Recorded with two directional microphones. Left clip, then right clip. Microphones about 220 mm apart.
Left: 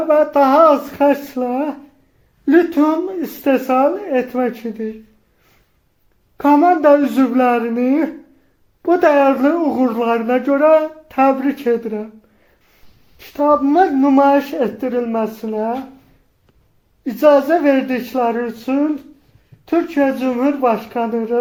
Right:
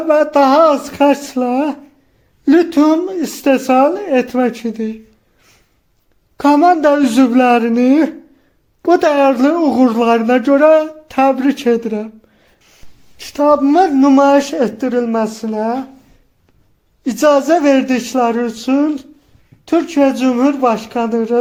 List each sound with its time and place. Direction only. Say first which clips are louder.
0.1 s speech: right 2 dB; 35° right (ahead or behind)
6.3 s speech: right 2 dB; 40° right (ahead or behind)
13.1 s speech: right 3 dB; 40° right (ahead or behind)
17.0 s speech: even; 35° right (ahead or behind)